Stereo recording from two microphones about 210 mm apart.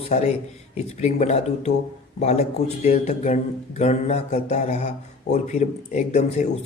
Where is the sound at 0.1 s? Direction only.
30° left (ahead or behind).